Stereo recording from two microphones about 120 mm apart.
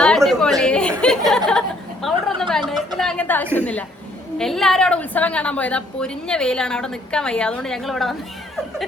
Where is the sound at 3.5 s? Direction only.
10° left (ahead or behind).